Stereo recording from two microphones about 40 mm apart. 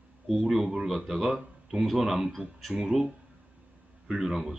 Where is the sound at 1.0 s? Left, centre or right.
Centre.